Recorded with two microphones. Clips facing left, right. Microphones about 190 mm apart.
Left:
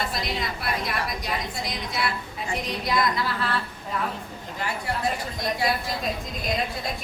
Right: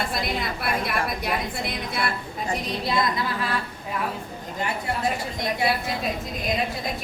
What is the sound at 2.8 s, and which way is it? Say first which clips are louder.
Speech: even; 25° right (ahead or behind).